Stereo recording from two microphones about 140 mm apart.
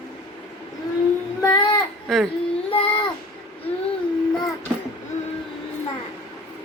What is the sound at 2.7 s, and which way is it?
Child singing, 45° left (ahead or behind).